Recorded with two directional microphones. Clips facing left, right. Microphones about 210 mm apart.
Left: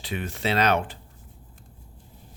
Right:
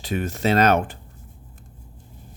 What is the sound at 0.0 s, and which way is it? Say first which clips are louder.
Speech: right 6 dB; 45° right (ahead or behind).